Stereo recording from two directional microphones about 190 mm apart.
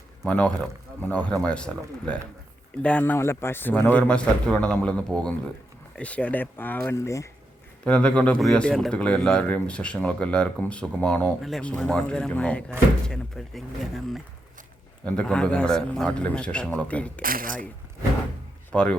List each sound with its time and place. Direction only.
0.3 s speech: 5° left (ahead or behind)
17.2 s speech: 50° right (ahead or behind)
18.7 s speech: 5° left (ahead or behind)